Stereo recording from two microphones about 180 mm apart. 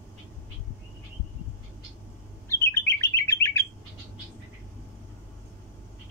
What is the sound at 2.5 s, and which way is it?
Bird, 15° left (ahead or behind).